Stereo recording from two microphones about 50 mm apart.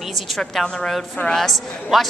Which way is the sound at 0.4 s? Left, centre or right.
Centre.